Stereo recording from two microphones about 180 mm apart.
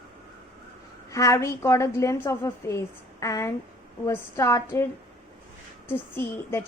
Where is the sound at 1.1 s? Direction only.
15° left (ahead or behind).